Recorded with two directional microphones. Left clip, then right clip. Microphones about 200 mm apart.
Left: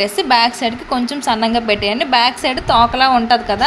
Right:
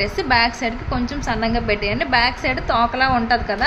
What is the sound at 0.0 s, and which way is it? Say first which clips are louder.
A woman's voice: left 4 dB; 20° left (ahead or behind).